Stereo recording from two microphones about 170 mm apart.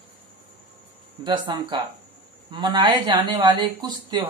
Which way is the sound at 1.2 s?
25° right (ahead or behind).